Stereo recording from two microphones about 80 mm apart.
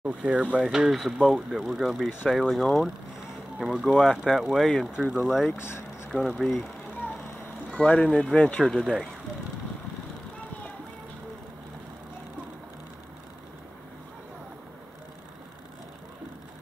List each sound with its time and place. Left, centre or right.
0.1 s speech: centre
5.6 s speech: left
6.1 s speech: centre
7.7 s speech: centre